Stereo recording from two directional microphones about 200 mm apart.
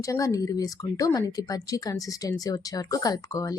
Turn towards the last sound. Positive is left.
turn(degrees=20)  # may be behind; listen again after turning